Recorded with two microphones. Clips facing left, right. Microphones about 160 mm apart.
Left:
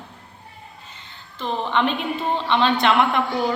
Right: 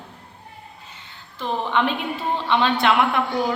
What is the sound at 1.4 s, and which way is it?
A man's voice, 10° right (ahead or behind).